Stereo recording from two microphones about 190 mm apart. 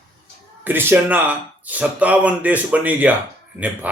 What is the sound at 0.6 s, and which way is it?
A man's voice, 10° right (ahead or behind).